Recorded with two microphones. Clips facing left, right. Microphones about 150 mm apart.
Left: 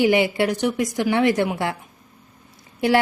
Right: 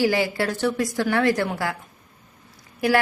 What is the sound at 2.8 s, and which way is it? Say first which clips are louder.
Speech: left 2 dB; 25° left (ahead or behind).